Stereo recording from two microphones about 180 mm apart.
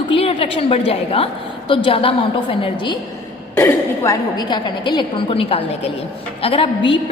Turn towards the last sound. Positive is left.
turn(degrees=30)  # may be behind; listen again after turning